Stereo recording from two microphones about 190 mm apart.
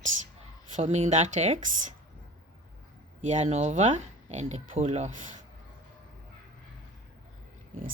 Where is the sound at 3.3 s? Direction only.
35° right (ahead or behind).